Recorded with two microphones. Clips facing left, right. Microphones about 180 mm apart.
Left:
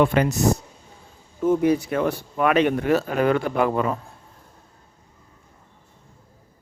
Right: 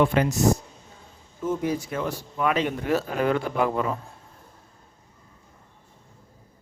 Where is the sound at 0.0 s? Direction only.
65° left (ahead or behind).